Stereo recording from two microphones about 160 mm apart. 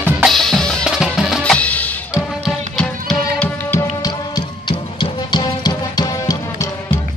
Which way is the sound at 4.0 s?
25° left (ahead or behind).